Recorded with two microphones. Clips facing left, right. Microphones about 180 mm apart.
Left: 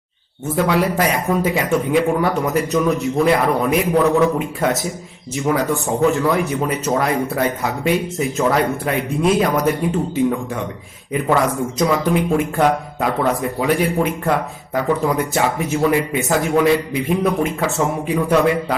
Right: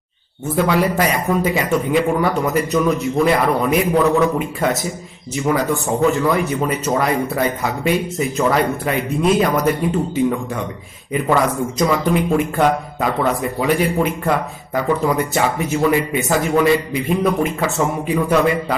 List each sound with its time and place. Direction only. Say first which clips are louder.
0.5 s a man's voice: right 1 dB; centre (ahead or behind)